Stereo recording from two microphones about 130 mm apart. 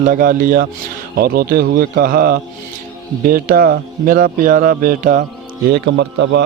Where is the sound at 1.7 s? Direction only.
90° right.